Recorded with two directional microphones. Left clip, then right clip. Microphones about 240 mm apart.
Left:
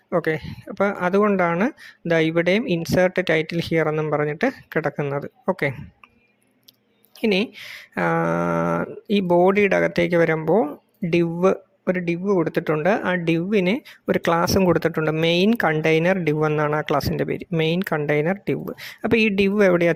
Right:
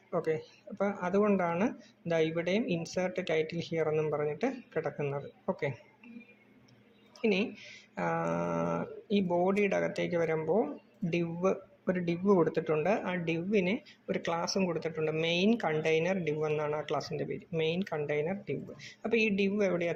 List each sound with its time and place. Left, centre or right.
0.1 s speech: left
7.2 s speech: left